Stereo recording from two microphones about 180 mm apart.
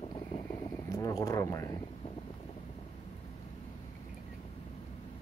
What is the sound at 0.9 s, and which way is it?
Speech, 20° left (ahead or behind).